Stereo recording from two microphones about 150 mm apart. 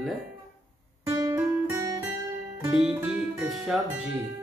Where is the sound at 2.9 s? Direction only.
10° right (ahead or behind).